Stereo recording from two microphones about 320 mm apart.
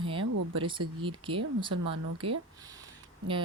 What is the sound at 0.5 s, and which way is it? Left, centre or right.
Speech, centre.